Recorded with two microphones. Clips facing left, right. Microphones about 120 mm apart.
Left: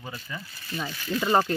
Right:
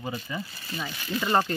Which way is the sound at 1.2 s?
5° left (ahead or behind).